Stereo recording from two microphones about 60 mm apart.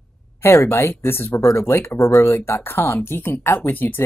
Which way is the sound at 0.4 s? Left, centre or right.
Left.